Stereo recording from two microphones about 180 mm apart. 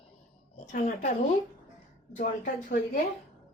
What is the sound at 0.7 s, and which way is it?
Speech, 45° left (ahead or behind).